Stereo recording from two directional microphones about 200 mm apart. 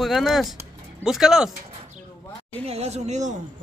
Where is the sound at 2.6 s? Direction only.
30° right (ahead or behind).